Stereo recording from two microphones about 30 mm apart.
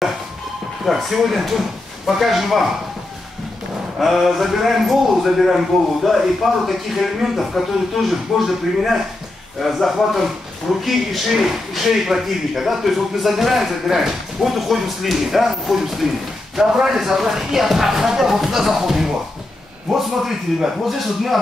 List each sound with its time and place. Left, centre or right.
1.1 s speech: centre
4.0 s a man's voice: centre